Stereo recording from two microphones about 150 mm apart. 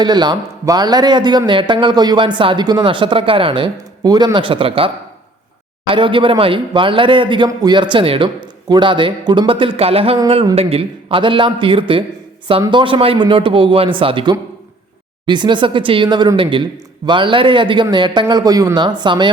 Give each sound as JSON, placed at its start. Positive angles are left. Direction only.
{"t": 0.0, "sound": "a man's voice", "side_deg": -30}
{"t": 5.9, "sound": "a man's voice", "side_deg": -35}